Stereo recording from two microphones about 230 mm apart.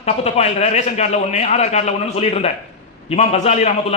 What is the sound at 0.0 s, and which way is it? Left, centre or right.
A man's voice, left.